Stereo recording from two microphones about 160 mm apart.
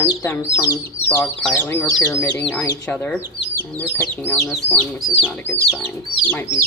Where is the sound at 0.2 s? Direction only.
20° left (ahead or behind).